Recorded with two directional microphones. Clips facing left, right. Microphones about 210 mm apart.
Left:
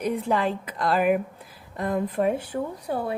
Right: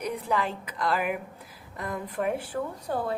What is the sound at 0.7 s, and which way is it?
A woman's voice, 35° left (ahead or behind).